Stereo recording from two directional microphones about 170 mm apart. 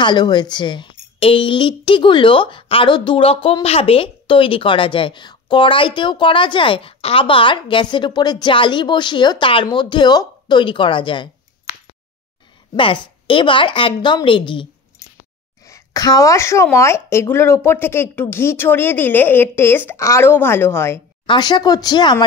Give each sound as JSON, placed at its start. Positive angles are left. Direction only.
{"t": 0.0, "sound": "a woman's voice", "side_deg": 25}
{"t": 12.7, "sound": "a woman's voice", "side_deg": 30}
{"t": 21.3, "sound": "a woman's voice", "side_deg": 25}